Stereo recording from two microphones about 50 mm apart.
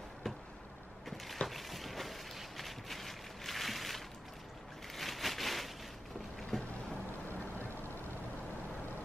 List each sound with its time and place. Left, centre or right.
1.1 s a sound: centre
6.5 s boat: centre
7.2 s vehicle: left